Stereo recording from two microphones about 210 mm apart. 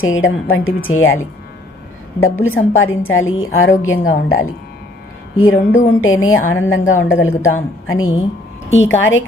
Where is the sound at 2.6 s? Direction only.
70° left (ahead or behind).